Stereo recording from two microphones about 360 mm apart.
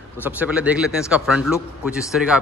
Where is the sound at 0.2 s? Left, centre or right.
Centre.